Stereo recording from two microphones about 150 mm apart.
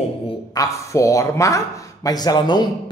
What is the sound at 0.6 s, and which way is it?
Speech, 20° left (ahead or behind).